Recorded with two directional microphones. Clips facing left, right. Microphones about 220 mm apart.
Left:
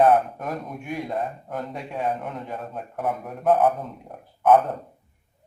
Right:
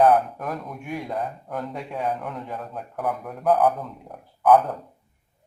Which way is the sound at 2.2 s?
25° left (ahead or behind).